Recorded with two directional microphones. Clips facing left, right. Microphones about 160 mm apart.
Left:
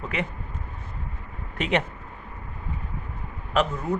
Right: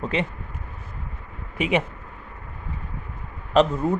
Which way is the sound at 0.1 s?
30° right (ahead or behind).